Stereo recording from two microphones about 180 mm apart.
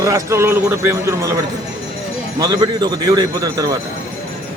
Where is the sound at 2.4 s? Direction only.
20° right (ahead or behind).